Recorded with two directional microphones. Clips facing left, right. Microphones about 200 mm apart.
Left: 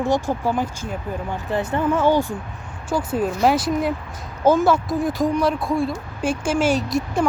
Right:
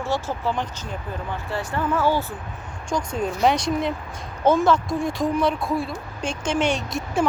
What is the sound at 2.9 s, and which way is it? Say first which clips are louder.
Speech: left 3 dB; 5° left (ahead or behind).